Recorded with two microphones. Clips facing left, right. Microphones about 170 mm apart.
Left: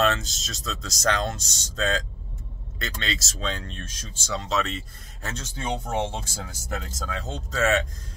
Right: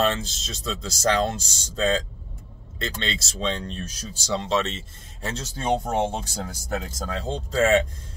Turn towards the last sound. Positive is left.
turn(degrees=-30)  # may be behind; listen again after turning